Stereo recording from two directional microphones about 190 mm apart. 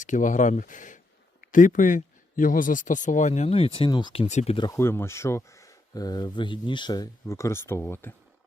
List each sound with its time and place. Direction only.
0.0 s speech: 40° left (ahead or behind)
4.7 s speech: 15° left (ahead or behind)